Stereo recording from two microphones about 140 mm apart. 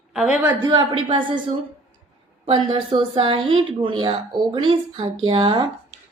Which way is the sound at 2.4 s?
40° right (ahead or behind).